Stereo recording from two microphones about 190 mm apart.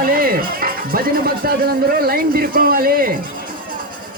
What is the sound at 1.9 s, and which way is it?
Speech, 55° right (ahead or behind).